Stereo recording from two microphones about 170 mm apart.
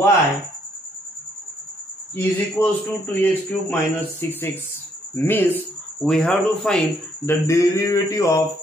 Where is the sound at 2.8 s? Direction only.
10° left (ahead or behind).